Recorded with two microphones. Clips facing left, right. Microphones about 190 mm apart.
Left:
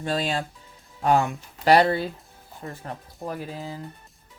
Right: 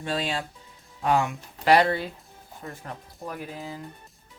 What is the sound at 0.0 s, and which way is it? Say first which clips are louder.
Speech: left 3 dB; 40° left (ahead or behind).